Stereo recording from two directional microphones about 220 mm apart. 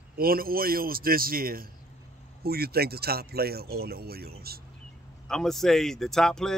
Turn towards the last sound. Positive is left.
turn(degrees=5)  # may be behind; listen again after turning